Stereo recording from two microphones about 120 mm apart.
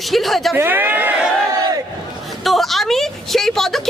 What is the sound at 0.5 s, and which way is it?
Speech, 15° right (ahead or behind).